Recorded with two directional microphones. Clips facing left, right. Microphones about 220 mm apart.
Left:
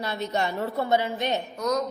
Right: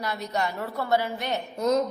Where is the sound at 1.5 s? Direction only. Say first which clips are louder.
Right 7 dB; 30° right (ahead or behind).